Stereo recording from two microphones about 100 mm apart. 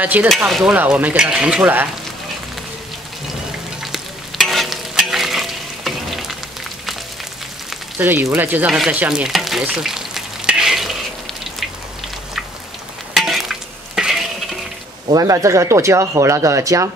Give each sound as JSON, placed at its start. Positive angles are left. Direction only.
{"t": 0.0, "sound": "speech", "side_deg": -15}
{"t": 0.5, "sound": "speech", "side_deg": 0}
{"t": 0.7, "sound": "speech", "side_deg": -15}
{"t": 3.8, "sound": "stir", "side_deg": 0}
{"t": 8.0, "sound": "speech", "side_deg": -20}
{"t": 8.9, "sound": "frying", "side_deg": -10}
{"t": 13.1, "sound": "stir", "side_deg": 0}
{"t": 15.1, "sound": "speech", "side_deg": -30}